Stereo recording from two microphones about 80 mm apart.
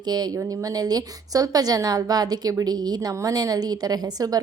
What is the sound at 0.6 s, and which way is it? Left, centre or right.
A woman's voice, right.